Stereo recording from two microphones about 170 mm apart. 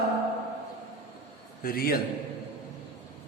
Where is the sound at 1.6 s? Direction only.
60° left (ahead or behind).